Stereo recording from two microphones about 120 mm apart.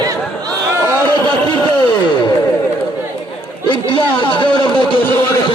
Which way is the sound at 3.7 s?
45° left (ahead or behind).